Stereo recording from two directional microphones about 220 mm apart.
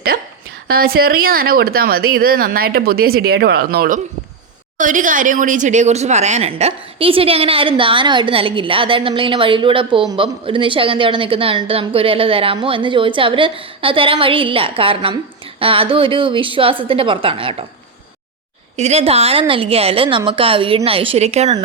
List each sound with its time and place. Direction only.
0.1 s a woman's voice: 40° right (ahead or behind); by 17.7 s 25° right (ahead or behind)
18.8 s a woman's voice: 30° right (ahead or behind)